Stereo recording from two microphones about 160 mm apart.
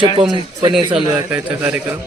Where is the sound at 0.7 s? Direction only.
5° right (ahead or behind).